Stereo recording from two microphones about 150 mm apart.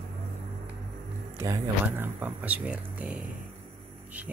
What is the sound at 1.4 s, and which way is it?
Speech, 15° right (ahead or behind).